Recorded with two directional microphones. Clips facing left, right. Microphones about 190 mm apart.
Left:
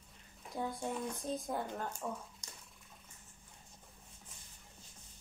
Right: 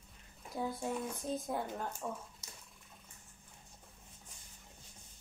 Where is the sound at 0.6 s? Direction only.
5° right (ahead or behind).